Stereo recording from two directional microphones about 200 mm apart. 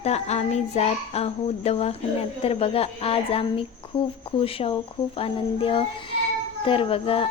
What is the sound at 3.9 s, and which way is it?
A woman's voice, 25° left (ahead or behind).